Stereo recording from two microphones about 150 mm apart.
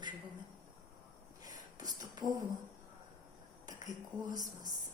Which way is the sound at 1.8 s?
25° right (ahead or behind).